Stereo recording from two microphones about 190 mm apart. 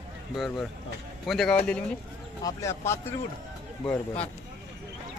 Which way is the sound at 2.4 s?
15° left (ahead or behind).